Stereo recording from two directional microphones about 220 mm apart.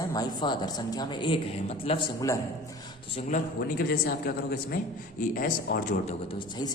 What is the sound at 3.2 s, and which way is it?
Speech, 35° left (ahead or behind).